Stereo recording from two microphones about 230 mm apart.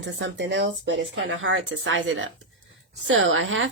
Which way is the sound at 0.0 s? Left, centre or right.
Right.